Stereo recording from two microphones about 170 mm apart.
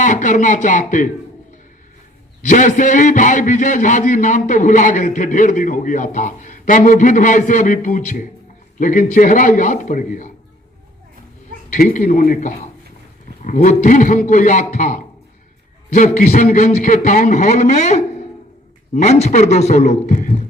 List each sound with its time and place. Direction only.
0.0 s a man's voice: 50° left (ahead or behind)
2.5 s a man's voice: 50° left (ahead or behind)
11.7 s a man's voice: 55° left (ahead or behind)